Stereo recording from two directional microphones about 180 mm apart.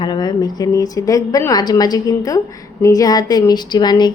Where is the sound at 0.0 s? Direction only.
25° left (ahead or behind).